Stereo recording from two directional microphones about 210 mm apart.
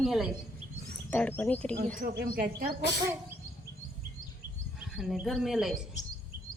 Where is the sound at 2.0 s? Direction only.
45° right (ahead or behind).